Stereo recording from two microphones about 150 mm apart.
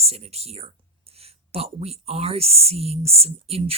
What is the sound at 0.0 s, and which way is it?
Speech, 45° right (ahead or behind).